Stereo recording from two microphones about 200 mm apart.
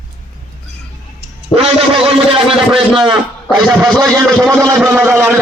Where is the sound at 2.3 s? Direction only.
25° right (ahead or behind).